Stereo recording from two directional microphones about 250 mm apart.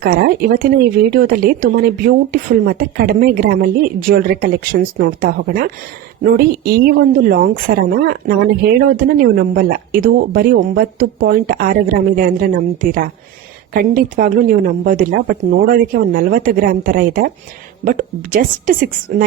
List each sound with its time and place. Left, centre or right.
0.0 s speech: right